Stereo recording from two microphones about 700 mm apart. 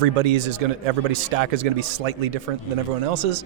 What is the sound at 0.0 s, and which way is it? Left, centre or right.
Speech, right.